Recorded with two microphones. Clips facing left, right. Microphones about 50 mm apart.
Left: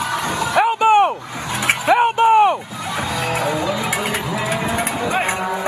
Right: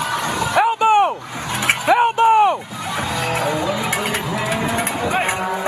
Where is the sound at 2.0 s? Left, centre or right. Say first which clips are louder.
Left 1 dB; left.